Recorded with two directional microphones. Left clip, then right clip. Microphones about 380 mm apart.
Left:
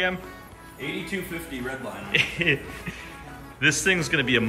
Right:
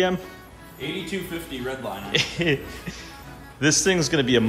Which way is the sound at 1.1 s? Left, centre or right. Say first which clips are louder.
Right 1 dB; centre.